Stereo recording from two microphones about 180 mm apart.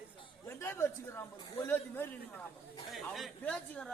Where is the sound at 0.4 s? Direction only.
15° left (ahead or behind).